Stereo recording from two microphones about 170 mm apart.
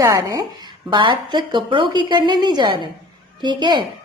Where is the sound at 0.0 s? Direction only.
20° right (ahead or behind).